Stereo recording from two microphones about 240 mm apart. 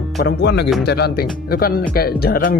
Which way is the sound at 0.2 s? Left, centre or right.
Left.